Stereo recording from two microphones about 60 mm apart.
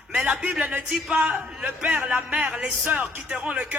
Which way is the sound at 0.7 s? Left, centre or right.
Centre.